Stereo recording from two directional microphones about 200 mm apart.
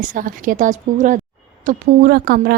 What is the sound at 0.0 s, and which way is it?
A woman's voice, 40° right (ahead or behind).